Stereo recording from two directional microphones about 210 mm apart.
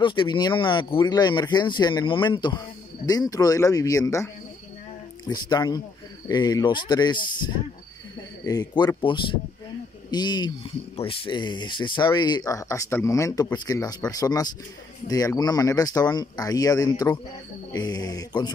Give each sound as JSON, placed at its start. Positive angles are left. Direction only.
{"t": 0.0, "sound": "speech", "side_deg": 20}